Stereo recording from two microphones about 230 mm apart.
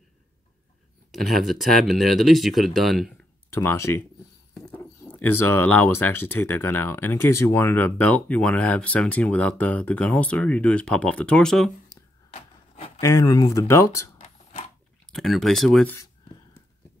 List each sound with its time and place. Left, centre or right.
1.1 s speech: centre
3.4 s speech: centre
12.3 s wood: left
13.0 s speech: centre
15.0 s speech: centre